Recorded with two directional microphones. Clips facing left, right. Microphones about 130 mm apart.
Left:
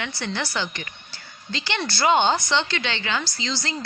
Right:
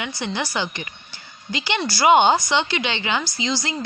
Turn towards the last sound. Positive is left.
turn(degrees=-15)  # may be behind; listen again after turning